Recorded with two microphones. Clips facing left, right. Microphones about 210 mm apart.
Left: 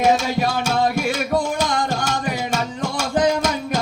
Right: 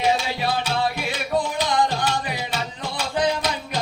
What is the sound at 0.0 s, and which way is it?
Music, 45° left (ahead or behind).